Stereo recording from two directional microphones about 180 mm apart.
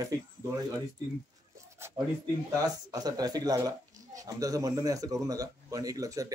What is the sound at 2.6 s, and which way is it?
Speech, 20° right (ahead or behind).